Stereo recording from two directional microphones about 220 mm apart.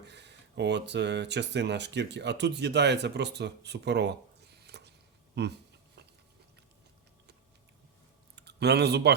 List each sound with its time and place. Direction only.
0.0 s speech: 50° right (ahead or behind)
4.7 s a sound: 50° right (ahead or behind)
5.3 s speech: 50° right (ahead or behind)
8.4 s speech: 50° right (ahead or behind)